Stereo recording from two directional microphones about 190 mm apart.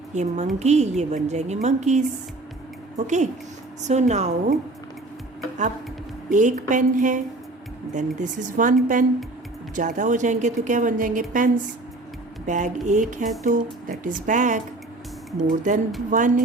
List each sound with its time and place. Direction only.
0.1 s a woman's voice: 40° right (ahead or behind)
3.8 s a woman's voice: 35° right (ahead or behind)
6.3 s a woman's voice: 40° right (ahead or behind)